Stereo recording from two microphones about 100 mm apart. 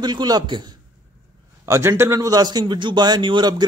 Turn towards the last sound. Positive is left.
turn(degrees=-50)  # may be behind; listen again after turning